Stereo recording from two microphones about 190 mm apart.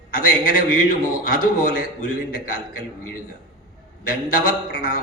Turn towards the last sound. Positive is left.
turn(degrees=45)  # may be behind; listen again after turning